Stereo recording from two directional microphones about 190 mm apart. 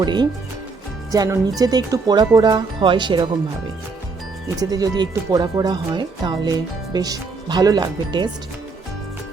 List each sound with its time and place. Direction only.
0.0 s speech: 25° right (ahead or behind)
4.6 s speech: 20° right (ahead or behind)